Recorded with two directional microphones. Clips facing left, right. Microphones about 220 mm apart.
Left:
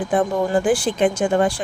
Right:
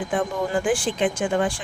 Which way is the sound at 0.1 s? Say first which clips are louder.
Left 6 dB; 35° left (ahead or behind).